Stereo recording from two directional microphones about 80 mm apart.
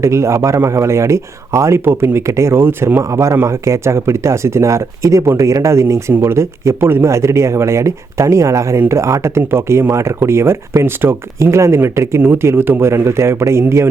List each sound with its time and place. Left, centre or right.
0.0 s speech: right